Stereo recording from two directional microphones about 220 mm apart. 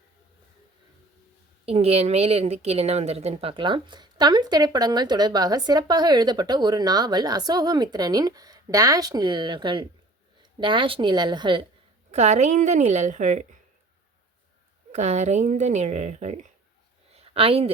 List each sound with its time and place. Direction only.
1.6 s a woman's voice: 30° right (ahead or behind)
14.9 s a woman's voice: 30° right (ahead or behind)
17.2 s a sound: 25° right (ahead or behind)